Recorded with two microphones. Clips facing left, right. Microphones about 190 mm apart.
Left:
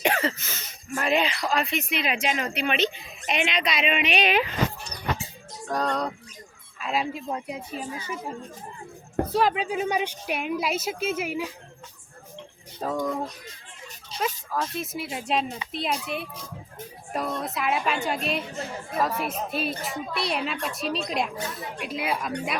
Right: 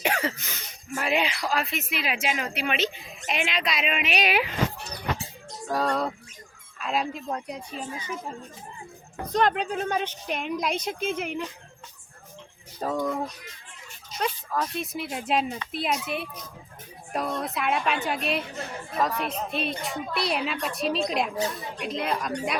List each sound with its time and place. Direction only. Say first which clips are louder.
0.0 s speech: left 2 dB; 10° right (ahead or behind)
5.6 s speech: right 1 dB; 5° right (ahead or behind)
12.8 s speech: even; centre (ahead or behind)
14.1 s speech: even; 30° left (ahead or behind)
14.5 s speech: even; centre (ahead or behind)